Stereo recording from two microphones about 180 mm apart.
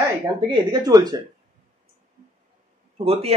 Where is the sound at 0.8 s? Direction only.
20° right (ahead or behind).